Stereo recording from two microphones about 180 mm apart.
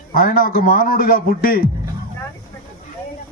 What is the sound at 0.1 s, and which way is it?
A man's voice, 50° left (ahead or behind).